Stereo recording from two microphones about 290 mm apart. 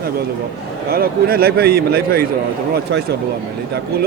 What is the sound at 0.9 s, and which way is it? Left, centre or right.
A man's voice, right.